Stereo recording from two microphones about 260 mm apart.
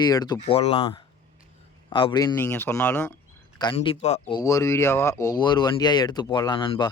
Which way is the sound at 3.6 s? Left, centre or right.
Centre.